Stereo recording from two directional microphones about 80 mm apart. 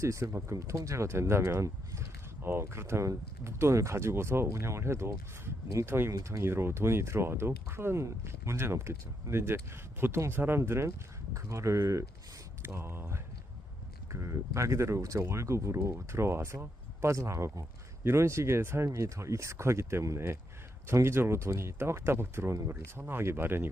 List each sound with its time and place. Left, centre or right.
0.0 s speech: right